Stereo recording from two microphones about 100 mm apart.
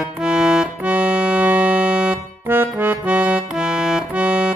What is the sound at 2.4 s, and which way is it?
Accordion, 20° right (ahead or behind).